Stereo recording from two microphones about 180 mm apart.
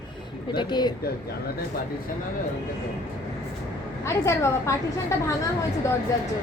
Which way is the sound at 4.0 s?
15° left (ahead or behind).